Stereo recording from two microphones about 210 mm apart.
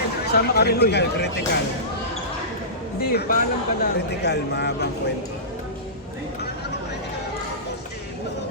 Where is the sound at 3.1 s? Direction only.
45° left (ahead or behind).